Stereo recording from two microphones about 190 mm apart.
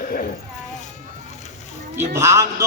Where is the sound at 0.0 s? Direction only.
50° left (ahead or behind).